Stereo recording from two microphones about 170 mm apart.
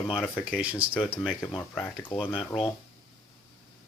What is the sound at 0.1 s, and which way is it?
Speech, 5° right (ahead or behind).